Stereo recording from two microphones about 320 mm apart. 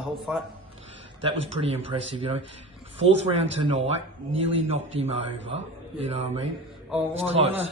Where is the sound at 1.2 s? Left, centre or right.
Centre.